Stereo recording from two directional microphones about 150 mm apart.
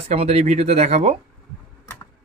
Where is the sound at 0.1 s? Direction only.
45° right (ahead or behind).